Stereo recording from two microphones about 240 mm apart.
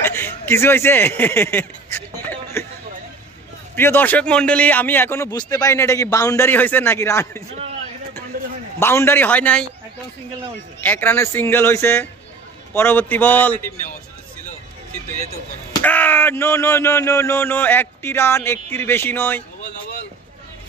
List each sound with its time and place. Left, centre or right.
0.0 s a sound: centre
3.7 s a man's voice: centre
8.3 s a sound: right
8.7 s a man's voice: centre
10.8 s a man's voice: centre
15.8 s a man's voice: centre